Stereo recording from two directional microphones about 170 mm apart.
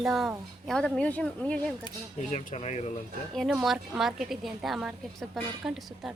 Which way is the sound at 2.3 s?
40° left (ahead or behind).